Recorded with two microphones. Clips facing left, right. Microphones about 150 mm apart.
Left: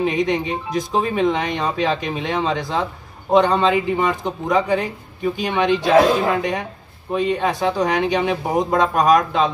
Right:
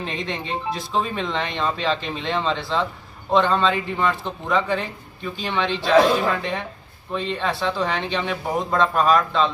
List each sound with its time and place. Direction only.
0.0 s a man's voice: 15° left (ahead or behind)